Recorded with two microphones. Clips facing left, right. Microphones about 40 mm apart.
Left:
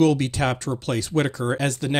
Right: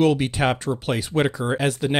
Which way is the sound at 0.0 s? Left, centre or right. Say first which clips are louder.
Even; centre.